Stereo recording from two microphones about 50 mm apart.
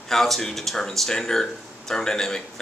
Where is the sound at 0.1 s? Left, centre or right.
Centre.